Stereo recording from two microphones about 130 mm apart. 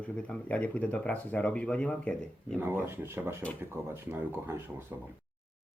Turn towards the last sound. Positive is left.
turn(degrees=-15)  # may be behind; listen again after turning